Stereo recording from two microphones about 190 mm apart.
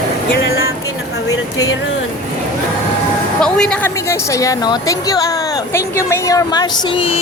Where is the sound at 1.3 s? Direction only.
20° left (ahead or behind).